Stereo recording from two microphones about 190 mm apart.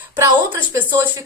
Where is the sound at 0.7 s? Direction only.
10° right (ahead or behind).